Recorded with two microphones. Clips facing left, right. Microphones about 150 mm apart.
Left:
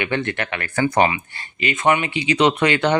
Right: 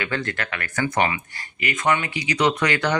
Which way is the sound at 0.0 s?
25° left (ahead or behind).